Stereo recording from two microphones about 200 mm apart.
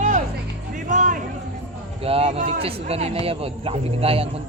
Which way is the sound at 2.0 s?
30° right (ahead or behind).